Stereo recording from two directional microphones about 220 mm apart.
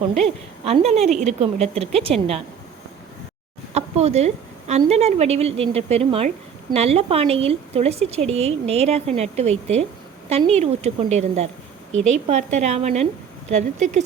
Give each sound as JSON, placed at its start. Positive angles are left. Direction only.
{"t": 0.1, "sound": "speech", "side_deg": -30}
{"t": 3.8, "sound": "a woman's voice", "side_deg": -30}